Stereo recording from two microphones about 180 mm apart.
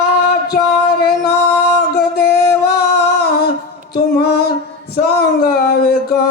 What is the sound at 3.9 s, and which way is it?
Music, 60° left (ahead or behind).